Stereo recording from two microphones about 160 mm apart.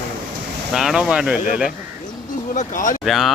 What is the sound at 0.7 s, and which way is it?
Speech, centre (ahead or behind).